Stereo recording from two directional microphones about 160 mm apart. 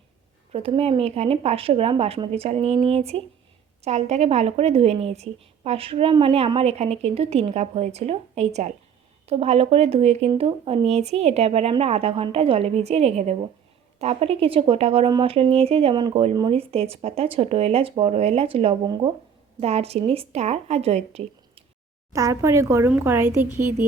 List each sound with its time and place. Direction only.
0.5 s a woman's voice: 35° right (ahead or behind)
19.5 s a woman's voice: 40° right (ahead or behind)
22.1 s speech: 20° right (ahead or behind)